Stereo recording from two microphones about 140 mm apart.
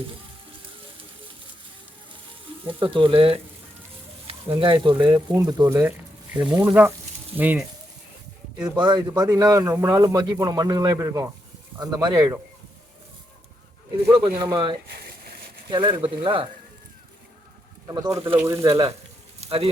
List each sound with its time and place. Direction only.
2.6 s speech: 40° right (ahead or behind)
6.3 s speech: 10° right (ahead or behind)
8.8 s speech: 30° right (ahead or behind)
14.5 s speech: 35° right (ahead or behind)
15.0 s a sound: 90° right
15.7 s speech: 35° right (ahead or behind)
17.8 s speech: 30° right (ahead or behind)
19.4 s a sound: 45° right (ahead or behind)